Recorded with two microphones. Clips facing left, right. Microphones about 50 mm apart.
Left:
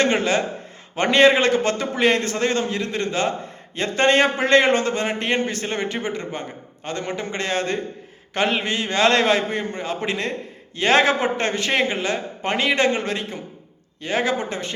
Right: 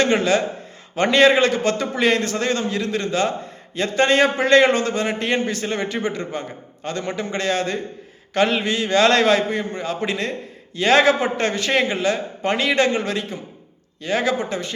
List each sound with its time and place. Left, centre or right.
0.0 s a man's voice: left
8.3 s a sound: left
8.6 s a man's voice: left